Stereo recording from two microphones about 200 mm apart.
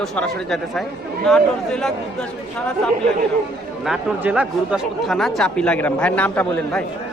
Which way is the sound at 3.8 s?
5° right (ahead or behind).